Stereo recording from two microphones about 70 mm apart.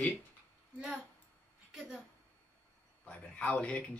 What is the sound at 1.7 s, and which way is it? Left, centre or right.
Speech, centre.